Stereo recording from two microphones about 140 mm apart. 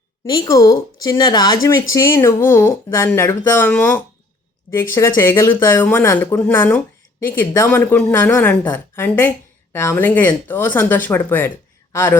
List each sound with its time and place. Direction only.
0.3 s speech: 25° left (ahead or behind)